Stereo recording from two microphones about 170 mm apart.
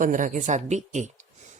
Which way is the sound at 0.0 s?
50° right (ahead or behind).